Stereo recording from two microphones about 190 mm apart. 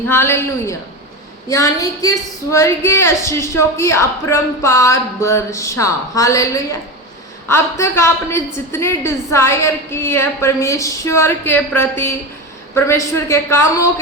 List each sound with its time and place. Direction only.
0.1 s speech: 15° left (ahead or behind)